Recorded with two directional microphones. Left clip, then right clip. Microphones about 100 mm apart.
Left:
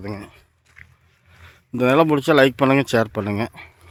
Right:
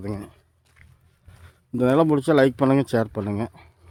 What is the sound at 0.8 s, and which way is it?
Biting, 10° right (ahead or behind).